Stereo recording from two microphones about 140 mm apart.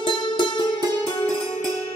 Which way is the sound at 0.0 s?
35° left (ahead or behind).